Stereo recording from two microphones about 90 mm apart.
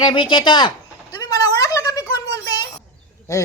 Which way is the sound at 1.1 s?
40° left (ahead or behind).